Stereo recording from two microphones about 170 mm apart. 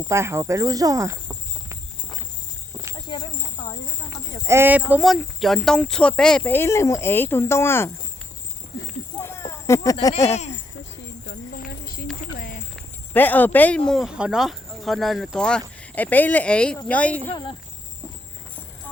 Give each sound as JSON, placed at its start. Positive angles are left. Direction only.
{"t": 0.1, "sound": "speech", "side_deg": -15}
{"t": 3.1, "sound": "snake", "side_deg": 25}
{"t": 4.4, "sound": "speech", "side_deg": -15}
{"t": 4.9, "sound": "speech", "side_deg": 0}
{"t": 9.2, "sound": "a sound", "side_deg": 15}
{"t": 11.3, "sound": "clip-clop", "side_deg": 60}
{"t": 12.2, "sound": "a sound", "side_deg": 55}
{"t": 13.1, "sound": "speech", "side_deg": 10}